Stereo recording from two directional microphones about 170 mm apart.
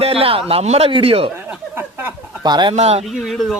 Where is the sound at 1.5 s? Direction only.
10° right (ahead or behind).